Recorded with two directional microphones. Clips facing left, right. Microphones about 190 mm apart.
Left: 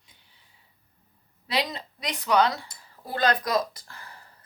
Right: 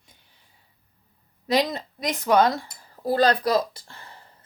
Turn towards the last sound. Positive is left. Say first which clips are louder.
# right 1 dB
turn(degrees=-25)  # may be behind; listen again after turning